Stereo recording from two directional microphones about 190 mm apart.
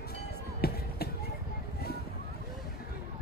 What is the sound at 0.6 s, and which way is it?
Basketball bounce, 55° left (ahead or behind).